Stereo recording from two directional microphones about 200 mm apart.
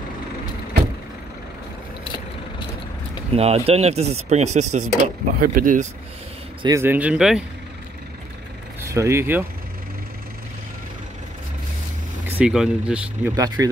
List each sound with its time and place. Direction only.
3.3 s speech: 30° right (ahead or behind)
6.6 s speech: 15° right (ahead or behind)
8.8 s speech: 15° right (ahead or behind)
12.3 s speech: 5° right (ahead or behind)
13.6 s speech: 15° right (ahead or behind)